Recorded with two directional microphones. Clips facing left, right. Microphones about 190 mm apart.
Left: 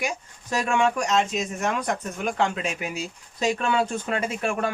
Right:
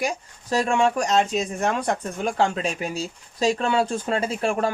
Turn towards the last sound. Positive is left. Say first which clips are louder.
# right 3 dB
turn(degrees=-35)  # may be behind; listen again after turning